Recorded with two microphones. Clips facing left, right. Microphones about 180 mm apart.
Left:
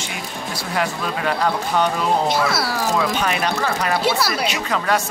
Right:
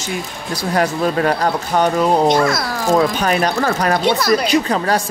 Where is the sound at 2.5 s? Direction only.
5° left (ahead or behind).